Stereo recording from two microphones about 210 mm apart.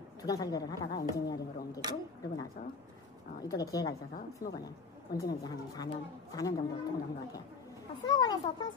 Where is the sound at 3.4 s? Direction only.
15° left (ahead or behind).